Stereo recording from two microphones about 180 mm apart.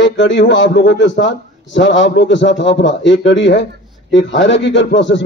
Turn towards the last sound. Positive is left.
turn(degrees=85)